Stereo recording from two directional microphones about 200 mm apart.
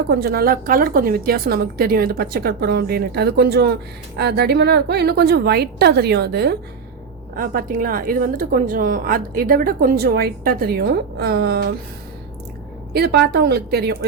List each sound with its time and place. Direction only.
0.1 s a woman's voice: 50° right (ahead or behind)
7.3 s speech: 45° right (ahead or behind)
12.9 s speech: 55° right (ahead or behind)